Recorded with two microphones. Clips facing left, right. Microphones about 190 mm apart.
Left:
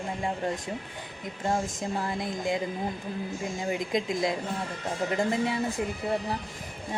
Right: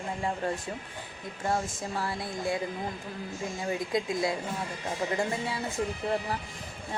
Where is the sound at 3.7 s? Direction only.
20° left (ahead or behind).